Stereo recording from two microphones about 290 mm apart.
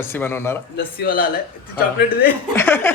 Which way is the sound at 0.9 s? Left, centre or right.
Left.